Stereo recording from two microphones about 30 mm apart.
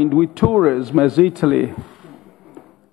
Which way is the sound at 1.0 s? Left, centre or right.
Right.